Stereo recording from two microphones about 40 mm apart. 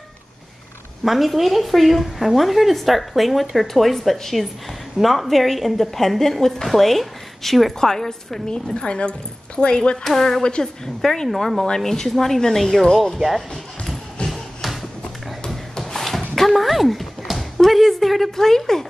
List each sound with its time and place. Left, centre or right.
1.0 s a woman's voice: centre
8.7 s a woman's voice: left
10.0 s a woman's voice: centre
10.4 s a woman's voice: left
11.0 s a woman's voice: centre
14.3 s music: centre
15.9 s dog: centre
17.3 s speech: centre